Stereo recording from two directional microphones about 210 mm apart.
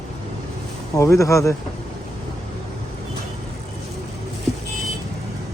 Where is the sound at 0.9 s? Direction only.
15° left (ahead or behind).